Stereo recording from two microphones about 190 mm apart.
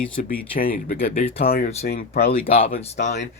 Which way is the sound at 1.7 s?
35° left (ahead or behind).